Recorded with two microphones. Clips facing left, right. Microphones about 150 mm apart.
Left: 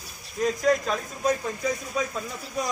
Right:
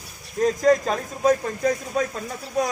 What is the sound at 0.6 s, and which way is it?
Speech, 40° right (ahead or behind).